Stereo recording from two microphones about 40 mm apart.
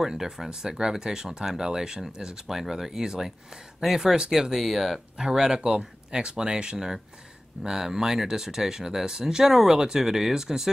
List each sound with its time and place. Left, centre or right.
0.0 s speech: centre
5.1 s speech: centre